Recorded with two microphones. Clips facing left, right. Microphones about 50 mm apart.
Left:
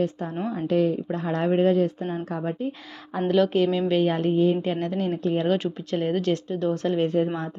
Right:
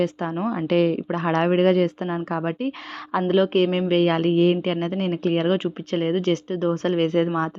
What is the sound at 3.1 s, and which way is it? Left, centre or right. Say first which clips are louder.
Speech: right 3 dB; right.